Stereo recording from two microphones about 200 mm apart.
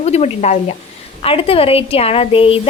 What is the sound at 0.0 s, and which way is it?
A woman's voice, 35° left (ahead or behind).